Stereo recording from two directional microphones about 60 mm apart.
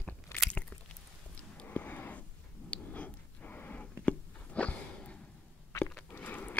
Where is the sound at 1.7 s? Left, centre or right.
Left.